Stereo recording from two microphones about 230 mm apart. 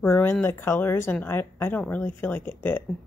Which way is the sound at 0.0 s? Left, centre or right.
Centre.